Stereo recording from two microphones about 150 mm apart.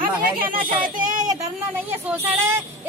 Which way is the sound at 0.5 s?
35° right (ahead or behind).